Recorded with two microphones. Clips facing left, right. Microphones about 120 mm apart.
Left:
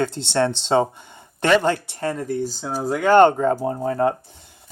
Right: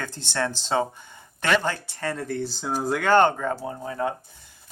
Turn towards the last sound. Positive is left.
turn(degrees=45)  # may be behind; listen again after turning